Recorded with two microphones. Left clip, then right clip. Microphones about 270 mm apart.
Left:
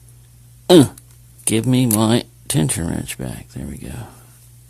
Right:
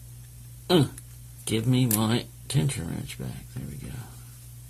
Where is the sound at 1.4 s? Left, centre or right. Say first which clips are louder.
Left 9 dB; left.